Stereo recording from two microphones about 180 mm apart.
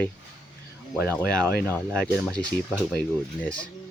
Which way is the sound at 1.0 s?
15° right (ahead or behind).